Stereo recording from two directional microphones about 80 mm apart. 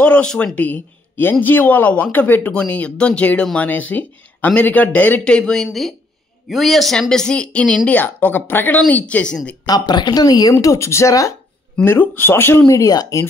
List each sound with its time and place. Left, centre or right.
0.0 s speech: centre
9.7 s speech: left
10.6 s speech: left
11.8 s speech: left
12.6 s speech: left